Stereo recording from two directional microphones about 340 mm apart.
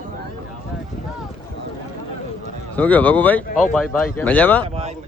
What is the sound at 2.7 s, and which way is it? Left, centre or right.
A man's voice, centre.